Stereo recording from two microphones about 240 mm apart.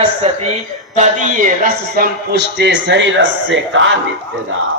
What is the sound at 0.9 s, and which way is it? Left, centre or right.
A man's voice, right.